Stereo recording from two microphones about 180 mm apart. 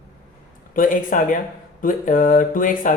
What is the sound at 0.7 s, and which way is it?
Speech, 50° left (ahead or behind).